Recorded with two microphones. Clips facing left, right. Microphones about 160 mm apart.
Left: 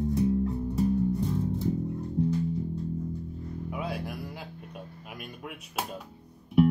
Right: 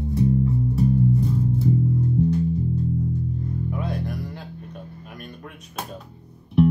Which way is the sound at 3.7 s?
5° left (ahead or behind).